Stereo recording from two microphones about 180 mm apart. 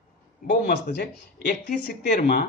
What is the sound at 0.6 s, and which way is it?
Speech, 65° left (ahead or behind).